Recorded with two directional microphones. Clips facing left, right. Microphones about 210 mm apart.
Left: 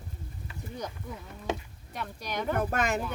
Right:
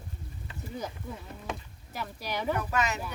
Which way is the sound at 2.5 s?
50° left (ahead or behind).